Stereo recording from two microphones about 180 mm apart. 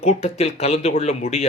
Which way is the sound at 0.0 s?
35° left (ahead or behind).